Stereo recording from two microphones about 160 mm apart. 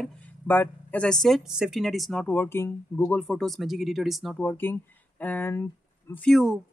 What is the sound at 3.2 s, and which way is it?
Speech, 5° left (ahead or behind).